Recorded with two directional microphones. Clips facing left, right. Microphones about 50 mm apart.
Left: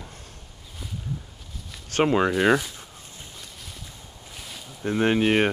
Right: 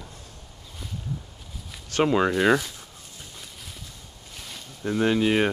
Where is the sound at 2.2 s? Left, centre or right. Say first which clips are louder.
Even; centre.